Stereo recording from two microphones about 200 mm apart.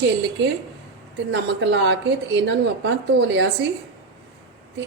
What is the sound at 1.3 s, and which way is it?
Speech, 60° right (ahead or behind).